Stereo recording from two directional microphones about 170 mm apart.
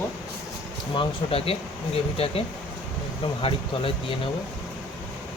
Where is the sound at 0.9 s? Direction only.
30° left (ahead or behind).